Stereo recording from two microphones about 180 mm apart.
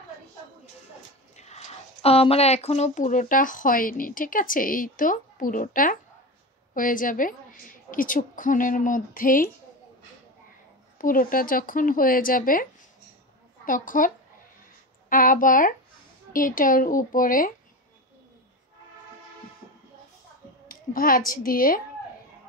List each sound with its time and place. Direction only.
1.3 s speech: 40° left (ahead or behind)
11.0 s speech: 50° left (ahead or behind)
13.7 s speech: 50° left (ahead or behind)
20.6 s speech: 50° left (ahead or behind)